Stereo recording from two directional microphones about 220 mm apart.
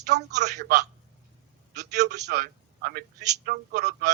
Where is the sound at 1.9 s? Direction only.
50° right (ahead or behind).